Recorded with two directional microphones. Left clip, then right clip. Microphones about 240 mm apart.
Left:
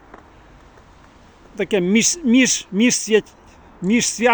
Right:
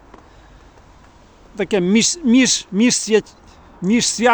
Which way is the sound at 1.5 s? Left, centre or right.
Centre.